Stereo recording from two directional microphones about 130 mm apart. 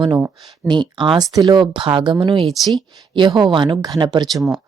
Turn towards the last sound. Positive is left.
turn(degrees=0)  # may be behind; listen again after turning